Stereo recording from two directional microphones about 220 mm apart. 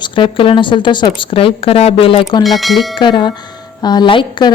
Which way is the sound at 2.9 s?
20° left (ahead or behind).